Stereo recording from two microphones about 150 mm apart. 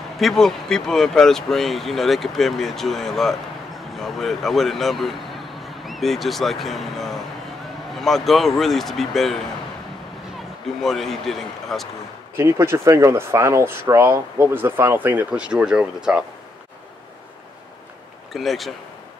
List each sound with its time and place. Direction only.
0.2 s speech: centre (ahead or behind)
10.8 s speech: centre (ahead or behind)
12.4 s speech: 20° right (ahead or behind)
18.3 s speech: centre (ahead or behind)